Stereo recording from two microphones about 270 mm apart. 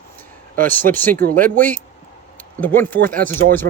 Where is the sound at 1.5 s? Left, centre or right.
Centre.